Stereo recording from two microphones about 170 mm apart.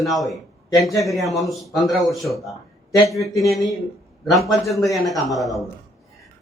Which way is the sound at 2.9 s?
20° left (ahead or behind).